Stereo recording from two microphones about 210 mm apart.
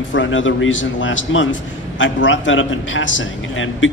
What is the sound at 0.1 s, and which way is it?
A man's voice, 65° left (ahead or behind).